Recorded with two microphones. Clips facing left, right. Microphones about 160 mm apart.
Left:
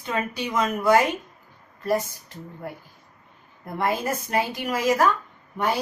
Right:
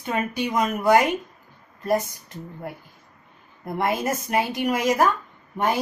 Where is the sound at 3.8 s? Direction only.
20° right (ahead or behind).